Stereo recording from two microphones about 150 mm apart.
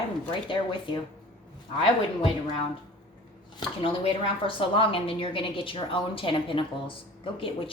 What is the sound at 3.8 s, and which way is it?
A woman's voice, 35° left (ahead or behind).